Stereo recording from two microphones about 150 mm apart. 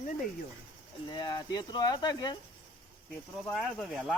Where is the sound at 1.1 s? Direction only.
30° left (ahead or behind).